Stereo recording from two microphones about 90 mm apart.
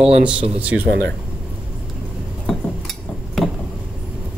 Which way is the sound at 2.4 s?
5° left (ahead or behind).